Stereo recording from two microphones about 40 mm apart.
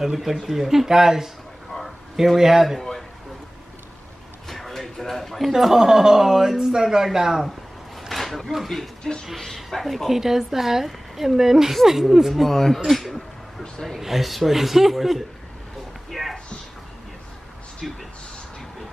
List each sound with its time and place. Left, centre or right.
0.0 s speech: centre
2.3 s speech: centre
4.5 s a sound: centre
5.5 s speech: centre
8.1 s a sound: centre
8.6 s speech: centre
10.0 s speech: centre
12.4 s speech: centre
16.1 s a sound: centre
17.8 s speech: centre